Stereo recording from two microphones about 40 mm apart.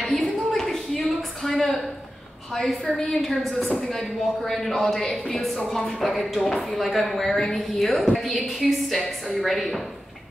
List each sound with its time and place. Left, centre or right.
0.0 s a sound: centre
2.5 s a woman's voice: centre
7.3 s speech: centre
7.8 s a woman's voice: centre